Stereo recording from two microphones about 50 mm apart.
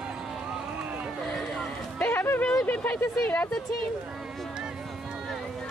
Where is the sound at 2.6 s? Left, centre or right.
Left.